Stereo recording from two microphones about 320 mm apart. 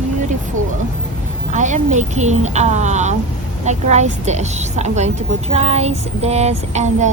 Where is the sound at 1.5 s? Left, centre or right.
Right.